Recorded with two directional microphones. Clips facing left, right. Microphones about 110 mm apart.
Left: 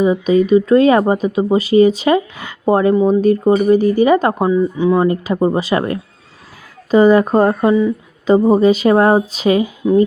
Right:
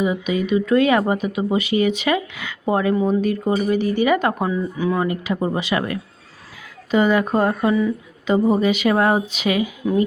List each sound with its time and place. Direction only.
0.0 s speech: 35° left (ahead or behind)
8.3 s speech: 35° left (ahead or behind)
9.8 s speech: 20° left (ahead or behind)